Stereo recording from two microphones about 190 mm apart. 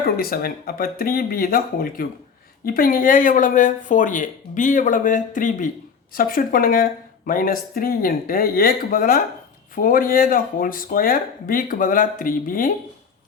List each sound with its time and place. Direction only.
0.2 s speech: 50° left (ahead or behind)